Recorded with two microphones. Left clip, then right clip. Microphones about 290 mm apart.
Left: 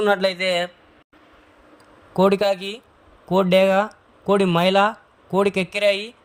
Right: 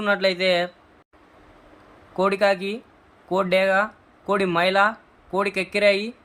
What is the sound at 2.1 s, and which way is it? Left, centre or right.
Speech, left.